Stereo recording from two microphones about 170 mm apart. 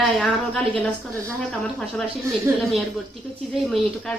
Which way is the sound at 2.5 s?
15° right (ahead or behind).